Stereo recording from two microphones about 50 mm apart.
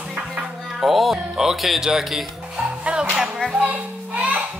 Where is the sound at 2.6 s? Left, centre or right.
Right.